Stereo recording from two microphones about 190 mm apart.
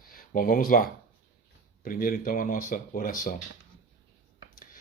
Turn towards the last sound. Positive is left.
turn(degrees=45)  # may be behind; listen again after turning